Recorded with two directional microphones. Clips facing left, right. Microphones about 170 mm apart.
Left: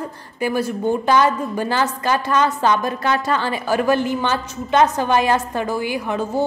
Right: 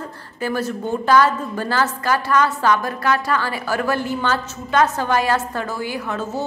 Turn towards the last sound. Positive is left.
turn(degrees=15)  # may be behind; listen again after turning